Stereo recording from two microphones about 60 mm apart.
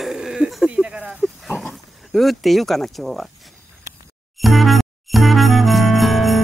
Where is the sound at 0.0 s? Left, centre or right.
Centre.